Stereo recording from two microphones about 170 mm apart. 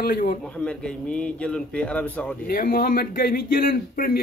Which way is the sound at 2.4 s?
60° left (ahead or behind).